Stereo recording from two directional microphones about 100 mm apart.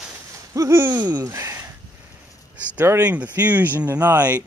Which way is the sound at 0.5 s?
30° right (ahead or behind).